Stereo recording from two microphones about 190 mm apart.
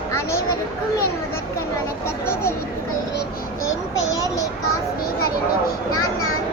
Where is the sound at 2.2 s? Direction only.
15° left (ahead or behind).